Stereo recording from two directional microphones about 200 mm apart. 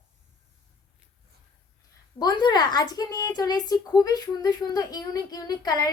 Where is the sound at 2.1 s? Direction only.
20° left (ahead or behind).